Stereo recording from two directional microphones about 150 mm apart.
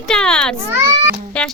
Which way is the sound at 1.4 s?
5° left (ahead or behind).